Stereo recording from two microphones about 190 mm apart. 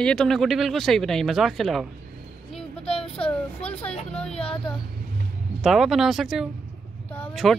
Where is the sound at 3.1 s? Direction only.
5° left (ahead or behind).